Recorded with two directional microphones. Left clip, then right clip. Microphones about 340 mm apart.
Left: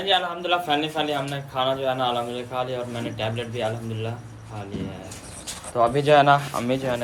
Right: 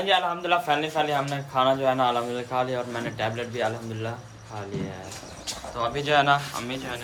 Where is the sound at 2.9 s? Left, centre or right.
Centre.